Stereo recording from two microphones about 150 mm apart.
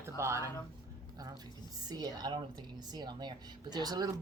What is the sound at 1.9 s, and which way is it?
A woman's voice, 25° right (ahead or behind).